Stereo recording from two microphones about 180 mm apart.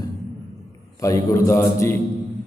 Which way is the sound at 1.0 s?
15° left (ahead or behind).